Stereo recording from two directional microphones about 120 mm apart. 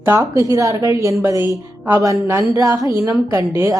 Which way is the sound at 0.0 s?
20° right (ahead or behind).